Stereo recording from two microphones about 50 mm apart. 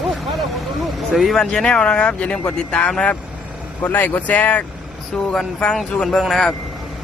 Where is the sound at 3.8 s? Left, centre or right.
Left.